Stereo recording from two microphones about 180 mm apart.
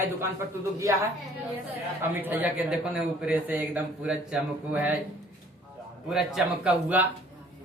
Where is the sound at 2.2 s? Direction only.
10° right (ahead or behind).